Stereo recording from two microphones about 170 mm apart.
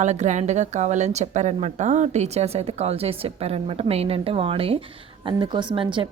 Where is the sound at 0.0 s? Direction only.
45° right (ahead or behind).